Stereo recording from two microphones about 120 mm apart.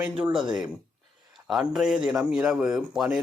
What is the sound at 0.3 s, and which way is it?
Speech, 5° right (ahead or behind).